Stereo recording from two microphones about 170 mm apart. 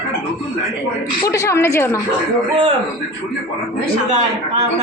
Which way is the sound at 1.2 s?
15° left (ahead or behind).